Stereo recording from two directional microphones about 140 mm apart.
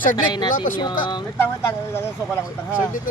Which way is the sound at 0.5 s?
70° left (ahead or behind).